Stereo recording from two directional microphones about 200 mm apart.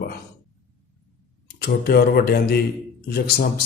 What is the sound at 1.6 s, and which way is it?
Speech, 50° left (ahead or behind).